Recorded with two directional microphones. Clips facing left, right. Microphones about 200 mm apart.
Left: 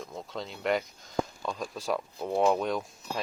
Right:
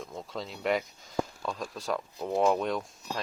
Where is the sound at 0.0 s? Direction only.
Centre (ahead or behind).